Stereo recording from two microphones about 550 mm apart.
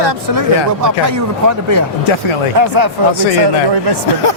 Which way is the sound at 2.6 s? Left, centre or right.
Right.